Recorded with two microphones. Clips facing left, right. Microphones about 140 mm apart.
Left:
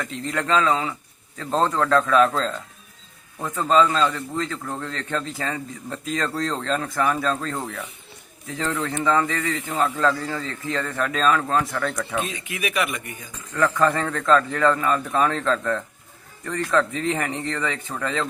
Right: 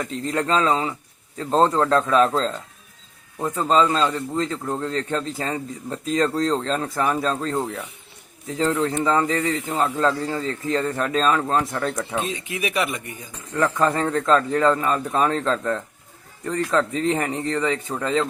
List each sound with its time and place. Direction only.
0.1 s speech: 30° right (ahead or behind)